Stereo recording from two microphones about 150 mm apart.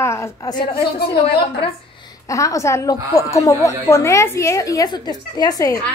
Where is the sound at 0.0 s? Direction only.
20° left (ahead or behind).